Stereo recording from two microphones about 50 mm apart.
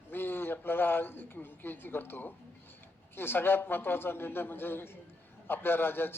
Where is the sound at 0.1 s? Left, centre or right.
Left.